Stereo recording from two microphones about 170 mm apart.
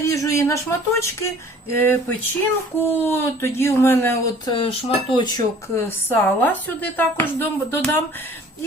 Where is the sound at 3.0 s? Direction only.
15° left (ahead or behind).